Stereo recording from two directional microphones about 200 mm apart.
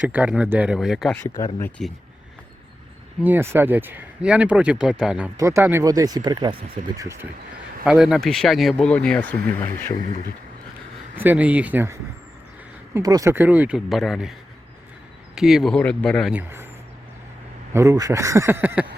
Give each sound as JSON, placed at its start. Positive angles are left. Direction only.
{"t": 0.1, "sound": "speech", "side_deg": -5}
{"t": 1.4, "sound": "speech", "side_deg": 15}
{"t": 3.2, "sound": "speech", "side_deg": -10}
{"t": 7.9, "sound": "speech", "side_deg": -5}
{"t": 11.1, "sound": "speech", "side_deg": -10}
{"t": 15.4, "sound": "speech", "side_deg": 0}
{"t": 16.4, "sound": "speech", "side_deg": -10}
{"t": 17.7, "sound": "speech", "side_deg": -15}